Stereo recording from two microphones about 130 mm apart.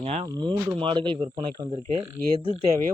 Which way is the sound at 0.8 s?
40° right (ahead or behind).